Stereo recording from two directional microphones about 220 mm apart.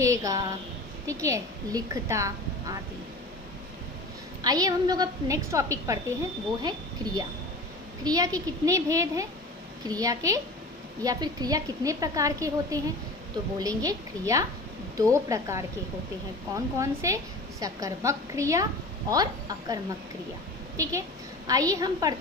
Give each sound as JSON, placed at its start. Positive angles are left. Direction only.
{"t": 0.0, "sound": "a sound", "side_deg": -15}
{"t": 1.0, "sound": "a woman's voice", "side_deg": -15}
{"t": 4.4, "sound": "a woman's voice", "side_deg": -15}
{"t": 16.7, "sound": "a woman's voice", "side_deg": -15}